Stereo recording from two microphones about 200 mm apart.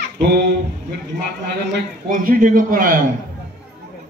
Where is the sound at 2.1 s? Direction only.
40° right (ahead or behind).